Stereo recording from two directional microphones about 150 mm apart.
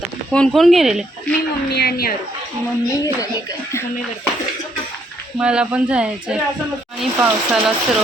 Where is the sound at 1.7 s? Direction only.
90° left.